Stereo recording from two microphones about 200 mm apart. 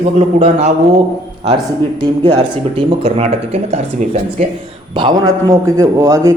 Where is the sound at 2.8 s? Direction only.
30° right (ahead or behind).